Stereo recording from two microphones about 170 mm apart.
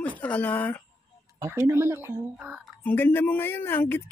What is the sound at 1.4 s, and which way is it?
Speech, 15° right (ahead or behind).